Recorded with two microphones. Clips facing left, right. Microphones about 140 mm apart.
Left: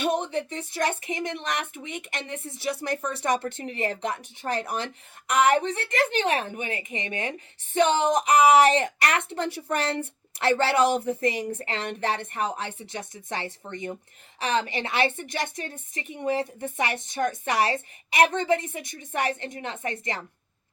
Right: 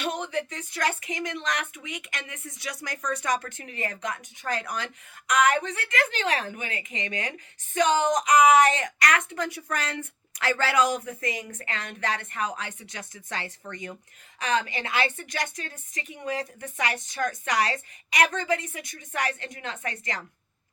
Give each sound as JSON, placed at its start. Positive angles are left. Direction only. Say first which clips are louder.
{"t": 0.3, "sound": "a woman's voice", "louder": "left 1 dB", "side_deg": 25}